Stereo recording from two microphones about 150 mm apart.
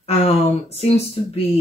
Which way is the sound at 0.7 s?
45° left (ahead or behind).